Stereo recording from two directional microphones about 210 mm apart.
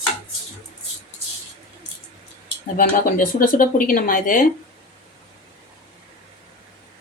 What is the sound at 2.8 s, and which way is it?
Speech, 40° left (ahead or behind).